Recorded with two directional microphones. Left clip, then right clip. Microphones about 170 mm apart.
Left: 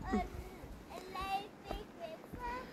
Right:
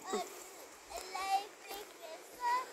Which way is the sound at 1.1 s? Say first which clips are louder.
Right 4 dB; centre (ahead or behind).